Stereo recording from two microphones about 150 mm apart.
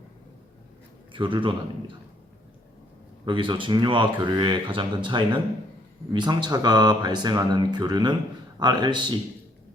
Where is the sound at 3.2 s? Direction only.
35° right (ahead or behind).